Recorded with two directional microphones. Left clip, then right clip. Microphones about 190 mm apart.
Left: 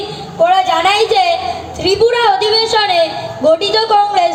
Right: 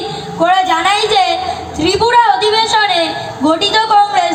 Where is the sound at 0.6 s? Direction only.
30° left (ahead or behind).